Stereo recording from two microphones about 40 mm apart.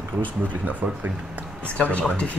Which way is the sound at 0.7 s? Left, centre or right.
Right.